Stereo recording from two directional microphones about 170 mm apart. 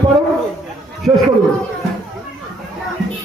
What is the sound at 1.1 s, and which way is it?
Speech, 30° right (ahead or behind).